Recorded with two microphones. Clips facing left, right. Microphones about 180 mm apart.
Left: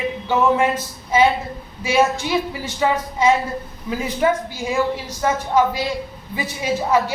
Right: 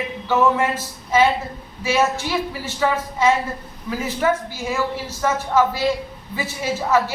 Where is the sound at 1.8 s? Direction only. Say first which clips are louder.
Left 2 dB; 15° left (ahead or behind).